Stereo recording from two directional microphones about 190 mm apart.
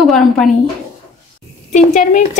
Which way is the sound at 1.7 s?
40° left (ahead or behind).